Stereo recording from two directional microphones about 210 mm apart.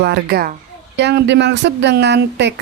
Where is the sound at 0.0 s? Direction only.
50° right (ahead or behind).